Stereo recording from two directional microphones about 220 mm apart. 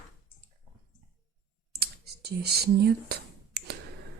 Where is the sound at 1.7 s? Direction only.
45° right (ahead or behind).